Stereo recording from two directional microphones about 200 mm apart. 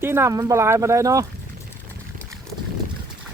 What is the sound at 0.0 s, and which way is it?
Speech, 10° right (ahead or behind).